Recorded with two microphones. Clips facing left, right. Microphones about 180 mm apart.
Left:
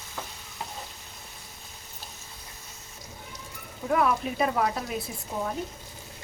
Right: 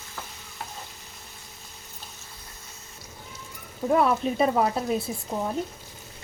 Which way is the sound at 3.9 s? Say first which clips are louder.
Right 3 dB; 30° right (ahead or behind).